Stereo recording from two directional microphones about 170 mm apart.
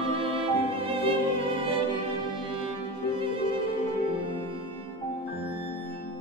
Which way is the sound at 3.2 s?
30° right (ahead or behind).